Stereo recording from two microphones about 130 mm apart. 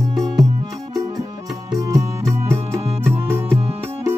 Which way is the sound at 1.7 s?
25° right (ahead or behind).